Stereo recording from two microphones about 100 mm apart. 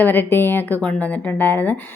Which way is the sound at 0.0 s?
20° left (ahead or behind).